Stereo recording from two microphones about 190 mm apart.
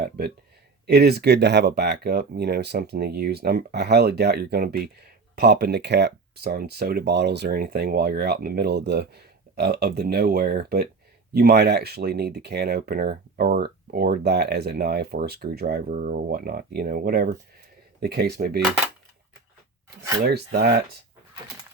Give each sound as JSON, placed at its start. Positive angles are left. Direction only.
{"t": 0.9, "sound": "speech", "side_deg": -60}
{"t": 20.2, "sound": "speech", "side_deg": -55}